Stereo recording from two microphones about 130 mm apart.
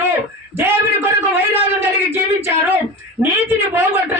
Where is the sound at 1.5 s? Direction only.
20° right (ahead or behind).